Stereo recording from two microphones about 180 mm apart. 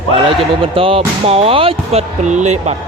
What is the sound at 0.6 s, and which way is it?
Speech, 30° right (ahead or behind).